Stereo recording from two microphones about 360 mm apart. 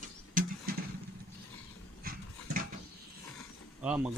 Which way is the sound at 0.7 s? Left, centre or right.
Right.